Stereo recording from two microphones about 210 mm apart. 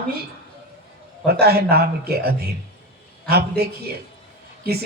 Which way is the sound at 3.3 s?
50° right (ahead or behind).